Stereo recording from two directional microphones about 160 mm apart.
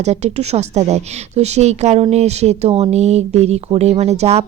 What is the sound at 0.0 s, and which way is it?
A woman's voice, 45° right (ahead or behind).